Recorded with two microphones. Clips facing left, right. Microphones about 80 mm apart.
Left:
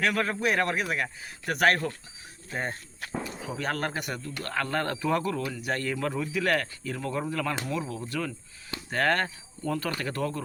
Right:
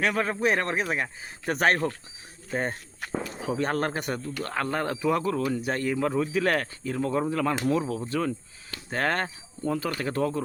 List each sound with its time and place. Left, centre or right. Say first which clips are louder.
0.0 s speech: right 2 dB; right
5.5 s speech: right 3 dB; right
6.1 s speech: right 2 dB; right
7.7 s speech: right 6 dB; right
8.0 s speech: right 5 dB; right